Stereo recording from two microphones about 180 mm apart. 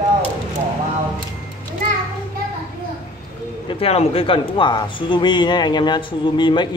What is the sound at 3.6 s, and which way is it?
Speech, 30° left (ahead or behind).